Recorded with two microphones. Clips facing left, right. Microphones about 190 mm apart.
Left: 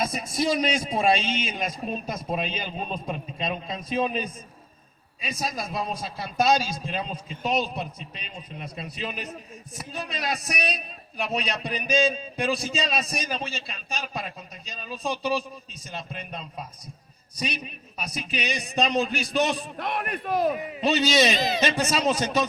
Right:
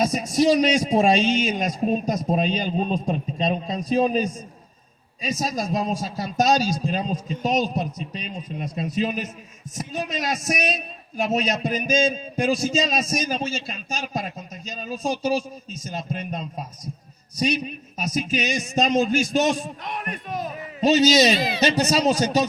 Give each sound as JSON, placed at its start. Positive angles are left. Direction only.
{"t": 0.0, "sound": "a man's voice", "side_deg": -40}
{"t": 19.8, "sound": "a man's voice", "side_deg": 60}
{"t": 20.8, "sound": "a man's voice", "side_deg": -40}